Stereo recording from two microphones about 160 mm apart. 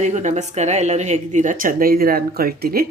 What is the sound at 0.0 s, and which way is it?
Speech, 45° right (ahead or behind).